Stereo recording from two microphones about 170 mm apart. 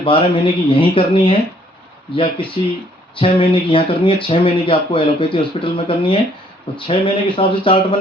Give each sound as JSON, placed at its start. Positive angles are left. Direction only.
{"t": 0.0, "sound": "speech", "side_deg": 30}